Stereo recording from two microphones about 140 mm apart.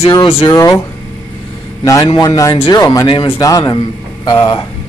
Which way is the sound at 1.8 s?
25° left (ahead or behind).